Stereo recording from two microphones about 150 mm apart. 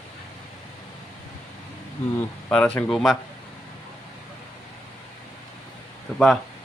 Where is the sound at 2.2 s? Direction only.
10° left (ahead or behind).